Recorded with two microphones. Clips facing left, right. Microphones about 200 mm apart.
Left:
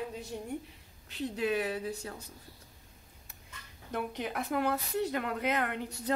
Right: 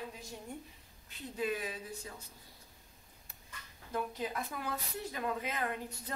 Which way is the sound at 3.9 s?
75° left (ahead or behind).